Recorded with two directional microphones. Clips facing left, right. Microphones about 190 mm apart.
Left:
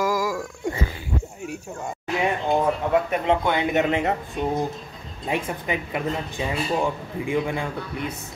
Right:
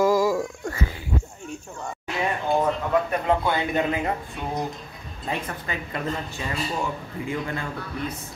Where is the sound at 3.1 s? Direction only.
20° left (ahead or behind).